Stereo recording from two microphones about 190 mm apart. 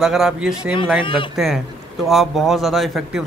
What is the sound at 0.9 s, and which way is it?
Speech, 25° left (ahead or behind).